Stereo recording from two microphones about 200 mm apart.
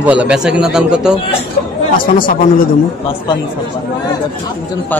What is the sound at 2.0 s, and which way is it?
Speech, 45° left (ahead or behind).